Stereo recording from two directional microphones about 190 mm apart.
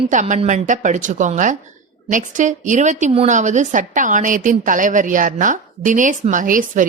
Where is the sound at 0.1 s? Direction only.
40° right (ahead or behind).